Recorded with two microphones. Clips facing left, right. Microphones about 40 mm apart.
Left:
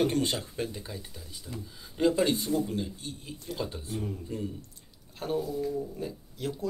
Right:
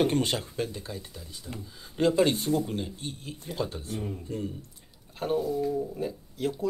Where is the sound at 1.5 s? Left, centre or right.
Right.